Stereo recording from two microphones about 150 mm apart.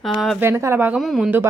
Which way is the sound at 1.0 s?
Centre (ahead or behind).